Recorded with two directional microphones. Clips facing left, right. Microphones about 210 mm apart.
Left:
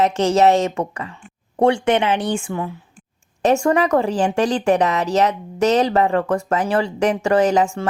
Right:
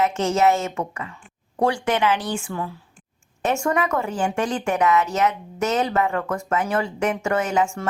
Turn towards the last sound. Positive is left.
turn(degrees=35)  # may be behind; listen again after turning